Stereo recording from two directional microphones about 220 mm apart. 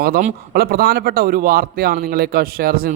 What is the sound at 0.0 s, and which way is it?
A man's voice, 40° right (ahead or behind).